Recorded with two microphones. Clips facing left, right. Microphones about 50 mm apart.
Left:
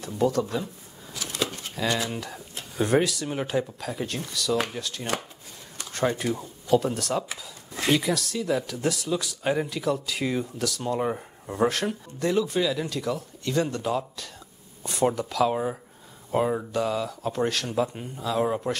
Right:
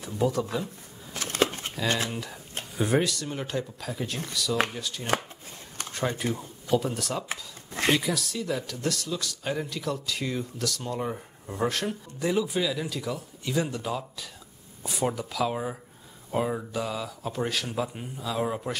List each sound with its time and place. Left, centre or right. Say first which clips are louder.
0.0 s speech: left 2 dB; centre
1.1 s a sound: right 4 dB; right
2.8 s speech: left 3 dB; centre
6.3 s speech: left 4 dB; centre
7.2 s speech: right 2 dB; right
8.0 s speech: left 3 dB; centre
11.0 s speech: left 4 dB; centre
11.5 s speech: left 4 dB; centre